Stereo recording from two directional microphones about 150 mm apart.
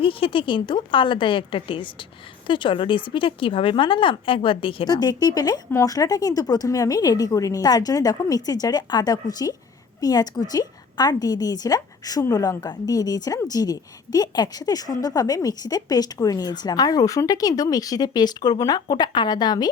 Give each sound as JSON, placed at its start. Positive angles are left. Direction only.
{"t": 0.0, "sound": "a woman's voice", "side_deg": 35}